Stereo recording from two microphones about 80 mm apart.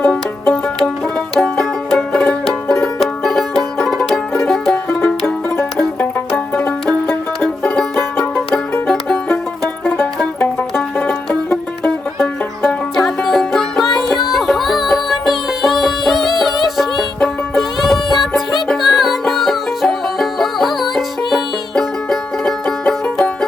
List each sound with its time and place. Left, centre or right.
0.1 s music: centre
4.9 s music: left
6.0 s banjo: left
7.4 s banjo: centre
8.9 s music: centre
11.8 s music: centre